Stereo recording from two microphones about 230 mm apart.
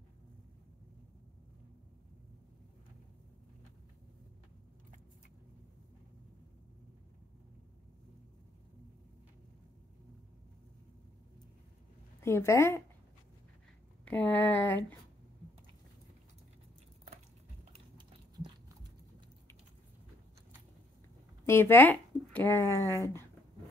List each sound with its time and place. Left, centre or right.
12.2 s speech: centre
14.0 s speech: centre
17.7 s typing: right
21.5 s speech: centre